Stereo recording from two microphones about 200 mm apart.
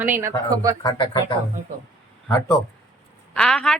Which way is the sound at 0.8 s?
25° left (ahead or behind).